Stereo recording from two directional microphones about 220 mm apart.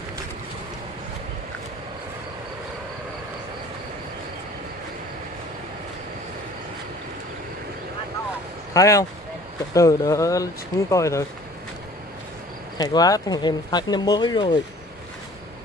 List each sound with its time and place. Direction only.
8.7 s speech: 15° left (ahead or behind)
12.7 s speech: 15° left (ahead or behind)